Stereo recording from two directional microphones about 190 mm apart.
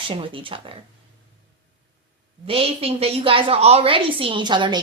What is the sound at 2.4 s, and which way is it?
A woman's voice, 30° right (ahead or behind).